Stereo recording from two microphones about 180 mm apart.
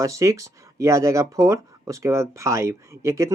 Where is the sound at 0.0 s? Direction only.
15° right (ahead or behind).